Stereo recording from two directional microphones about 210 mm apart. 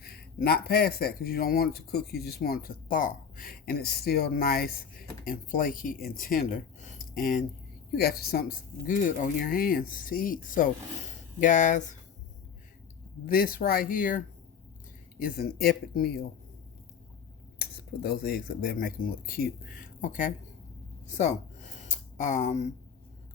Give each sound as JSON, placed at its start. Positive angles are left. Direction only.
{"t": 0.0, "sound": "speech", "side_deg": 50}
{"t": 13.2, "sound": "speech", "side_deg": 45}
{"t": 15.2, "sound": "speech", "side_deg": 45}
{"t": 17.6, "sound": "speech", "side_deg": 45}
{"t": 21.8, "sound": "a sound", "side_deg": 35}